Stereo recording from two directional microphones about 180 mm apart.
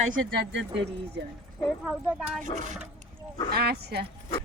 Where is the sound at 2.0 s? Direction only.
5° right (ahead or behind).